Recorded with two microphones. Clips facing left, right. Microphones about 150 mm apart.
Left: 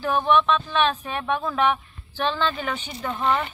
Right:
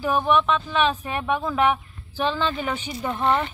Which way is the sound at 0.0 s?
10° right (ahead or behind).